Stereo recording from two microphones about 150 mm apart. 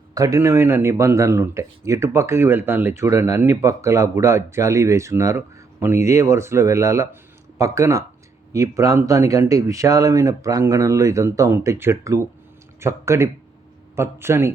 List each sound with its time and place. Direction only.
0.1 s a man's voice: 25° right (ahead or behind)